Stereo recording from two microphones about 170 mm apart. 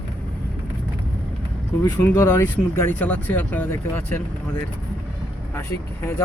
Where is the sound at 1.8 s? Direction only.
10° left (ahead or behind).